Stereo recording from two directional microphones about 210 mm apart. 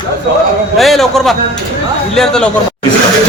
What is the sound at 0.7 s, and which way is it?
A man's voice, centre (ahead or behind).